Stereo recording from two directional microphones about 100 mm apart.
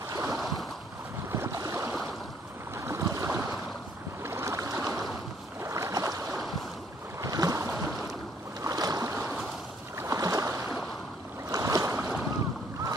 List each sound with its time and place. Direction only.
0.1 s boat: 35° right (ahead or behind)
1.3 s a sound: 30° right (ahead or behind)
2.8 s boat: 30° right (ahead or behind)